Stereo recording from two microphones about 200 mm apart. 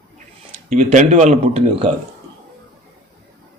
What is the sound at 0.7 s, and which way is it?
Speech, 35° right (ahead or behind).